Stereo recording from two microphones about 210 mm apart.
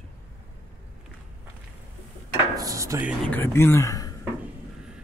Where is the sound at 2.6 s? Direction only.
15° right (ahead or behind).